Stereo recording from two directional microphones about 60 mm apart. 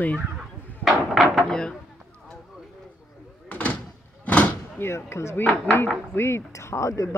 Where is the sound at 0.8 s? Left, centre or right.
Centre.